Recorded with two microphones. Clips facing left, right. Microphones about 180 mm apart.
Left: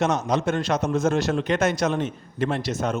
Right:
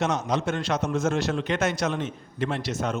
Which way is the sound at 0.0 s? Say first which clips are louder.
Left 3 dB; 45° left (ahead or behind).